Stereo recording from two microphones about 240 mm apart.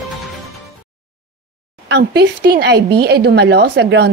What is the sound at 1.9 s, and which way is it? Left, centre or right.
A woman's voice, right.